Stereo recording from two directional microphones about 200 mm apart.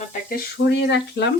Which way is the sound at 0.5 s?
60° left (ahead or behind).